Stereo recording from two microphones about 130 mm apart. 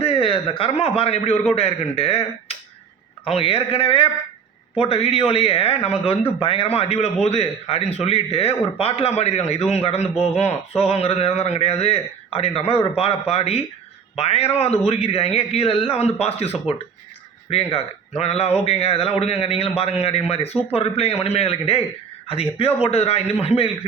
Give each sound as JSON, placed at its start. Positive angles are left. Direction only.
{"t": 0.0, "sound": "a man's voice", "side_deg": 45}